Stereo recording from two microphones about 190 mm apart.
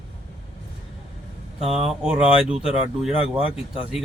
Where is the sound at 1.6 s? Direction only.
35° right (ahead or behind).